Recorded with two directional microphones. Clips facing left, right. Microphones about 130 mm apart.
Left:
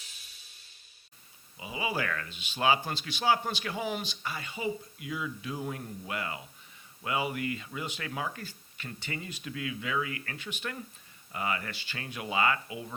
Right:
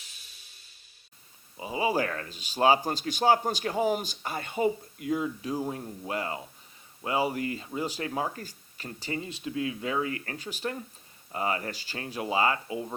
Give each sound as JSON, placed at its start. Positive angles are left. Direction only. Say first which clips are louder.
{"t": 1.5, "sound": "speech", "louder": "right 6 dB", "side_deg": -35}